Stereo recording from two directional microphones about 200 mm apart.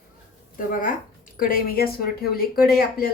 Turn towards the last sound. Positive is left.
turn(degrees=50)  # may be behind; listen again after turning